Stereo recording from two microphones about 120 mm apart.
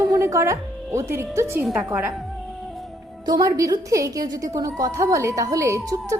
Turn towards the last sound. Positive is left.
turn(degrees=-25)  # may be behind; listen again after turning